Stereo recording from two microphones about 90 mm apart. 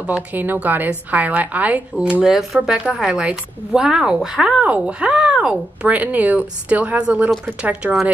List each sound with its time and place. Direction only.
0.0 s a woman's voice: 15° right (ahead or behind)